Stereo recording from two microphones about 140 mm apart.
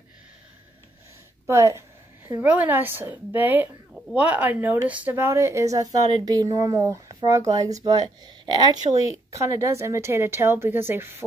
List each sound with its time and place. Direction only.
1.4 s a woman's voice: 20° right (ahead or behind)